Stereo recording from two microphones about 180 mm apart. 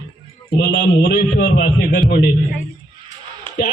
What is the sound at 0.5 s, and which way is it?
Speech, 70° left (ahead or behind).